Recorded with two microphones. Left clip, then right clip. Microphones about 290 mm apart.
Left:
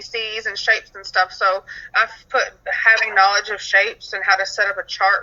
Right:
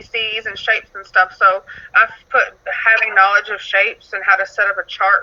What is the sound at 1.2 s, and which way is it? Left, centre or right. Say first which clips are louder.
Speech: right 5 dB; centre.